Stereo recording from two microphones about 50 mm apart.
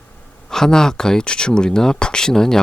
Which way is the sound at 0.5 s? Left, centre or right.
Centre.